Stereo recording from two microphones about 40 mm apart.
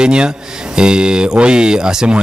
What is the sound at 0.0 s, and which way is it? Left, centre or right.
A man's voice, right.